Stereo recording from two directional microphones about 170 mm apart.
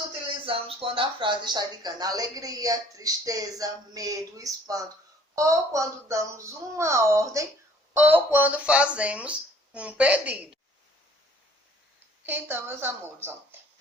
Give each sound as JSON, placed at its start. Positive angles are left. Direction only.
{"t": 0.4, "sound": "speech", "side_deg": -30}
{"t": 12.2, "sound": "speech", "side_deg": -10}